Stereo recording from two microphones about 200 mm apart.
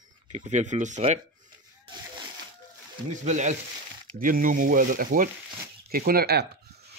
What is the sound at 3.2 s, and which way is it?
Speech, 35° right (ahead or behind).